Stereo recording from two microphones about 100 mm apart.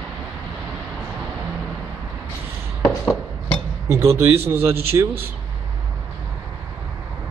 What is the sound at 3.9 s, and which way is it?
A man's voice, 30° right (ahead or behind).